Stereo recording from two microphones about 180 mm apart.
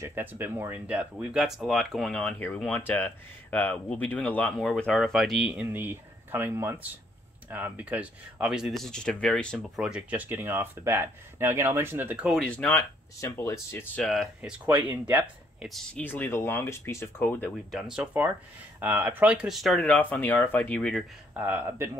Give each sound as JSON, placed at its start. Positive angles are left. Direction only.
{"t": 0.0, "sound": "speech", "side_deg": -10}
{"t": 14.0, "sound": "speech", "side_deg": 0}
{"t": 17.7, "sound": "speech", "side_deg": -5}
{"t": 21.3, "sound": "speech", "side_deg": -10}